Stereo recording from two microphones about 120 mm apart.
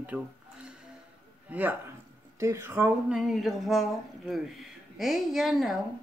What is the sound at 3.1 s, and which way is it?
Speech, centre (ahead or behind).